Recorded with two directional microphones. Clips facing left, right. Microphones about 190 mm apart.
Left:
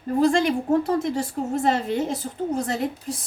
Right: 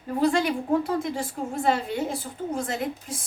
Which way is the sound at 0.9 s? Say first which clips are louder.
Left 4 dB; 45° left (ahead or behind).